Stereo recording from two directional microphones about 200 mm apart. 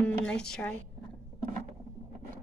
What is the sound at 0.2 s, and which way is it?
Speech, 5° left (ahead or behind).